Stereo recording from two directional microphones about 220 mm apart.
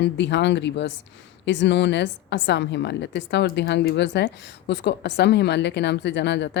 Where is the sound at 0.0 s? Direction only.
50° left (ahead or behind).